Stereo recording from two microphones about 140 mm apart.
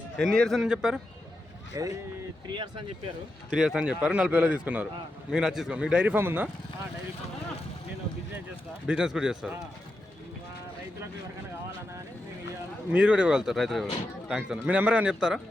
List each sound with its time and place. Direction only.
0.2 s speech: 5° left (ahead or behind)
1.7 s speech: 25° right (ahead or behind)
3.5 s a man's voice: 5° right (ahead or behind)
8.9 s speech: 5° right (ahead or behind)
12.9 s a man's voice: 10° right (ahead or behind)